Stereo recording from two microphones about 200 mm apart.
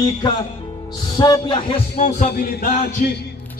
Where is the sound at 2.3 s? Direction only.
50° left (ahead or behind).